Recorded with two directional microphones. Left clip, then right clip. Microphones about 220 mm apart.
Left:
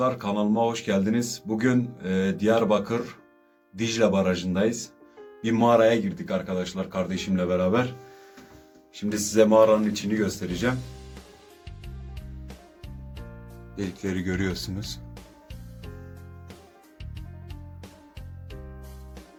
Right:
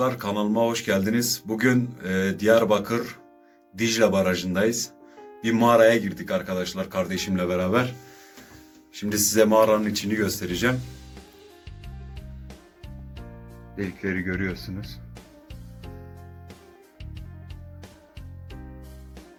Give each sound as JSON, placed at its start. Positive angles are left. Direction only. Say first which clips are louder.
{"t": 0.0, "sound": "speech", "louder": "even", "side_deg": 0}
{"t": 9.0, "sound": "speech", "louder": "right 1 dB", "side_deg": 0}
{"t": 14.2, "sound": "speech", "louder": "left 2 dB", "side_deg": 20}